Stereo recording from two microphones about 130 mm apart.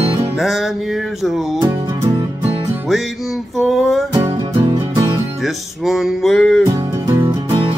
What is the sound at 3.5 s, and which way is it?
Music, centre (ahead or behind).